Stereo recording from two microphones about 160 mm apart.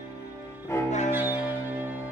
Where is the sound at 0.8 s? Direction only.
45° left (ahead or behind).